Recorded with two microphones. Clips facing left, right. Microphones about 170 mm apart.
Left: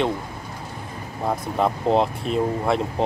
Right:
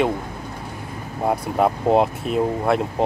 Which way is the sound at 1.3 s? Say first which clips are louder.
Right 3 dB; 5° right (ahead or behind).